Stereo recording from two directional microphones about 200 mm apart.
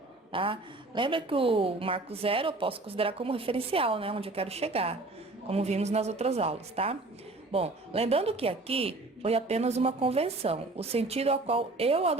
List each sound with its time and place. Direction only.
0.3 s a woman's voice: 25° right (ahead or behind)